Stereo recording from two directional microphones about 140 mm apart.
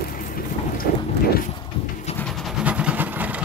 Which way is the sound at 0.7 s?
90° left.